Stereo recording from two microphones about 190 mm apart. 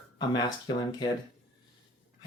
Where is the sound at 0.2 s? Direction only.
20° left (ahead or behind).